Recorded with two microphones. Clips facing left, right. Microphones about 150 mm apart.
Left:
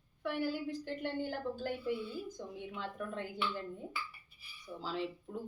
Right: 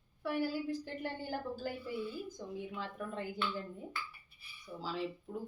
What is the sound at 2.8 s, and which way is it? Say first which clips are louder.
Speech: even; 5° right (ahead or behind).